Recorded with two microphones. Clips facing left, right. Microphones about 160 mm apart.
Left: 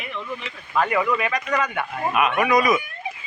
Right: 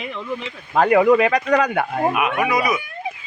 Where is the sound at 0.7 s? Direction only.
60° right (ahead or behind).